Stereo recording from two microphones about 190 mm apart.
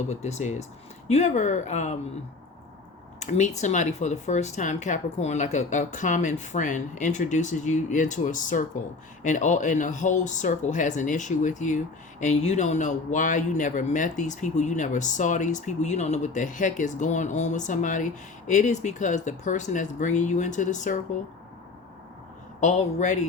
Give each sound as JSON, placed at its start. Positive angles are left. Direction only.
{"t": 0.1, "sound": "speech", "side_deg": 35}
{"t": 3.2, "sound": "speech", "side_deg": 35}
{"t": 22.6, "sound": "speech", "side_deg": 40}